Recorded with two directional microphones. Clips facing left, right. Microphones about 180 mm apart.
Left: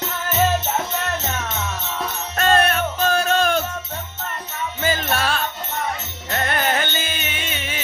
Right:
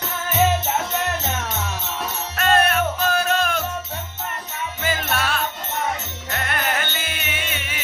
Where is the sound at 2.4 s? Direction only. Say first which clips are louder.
Left 1 dB; 30° left (ahead or behind).